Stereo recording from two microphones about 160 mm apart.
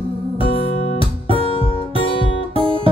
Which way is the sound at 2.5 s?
35° right (ahead or behind).